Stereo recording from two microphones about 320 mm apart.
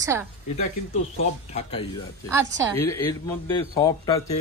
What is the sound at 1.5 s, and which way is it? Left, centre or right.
Speech, centre.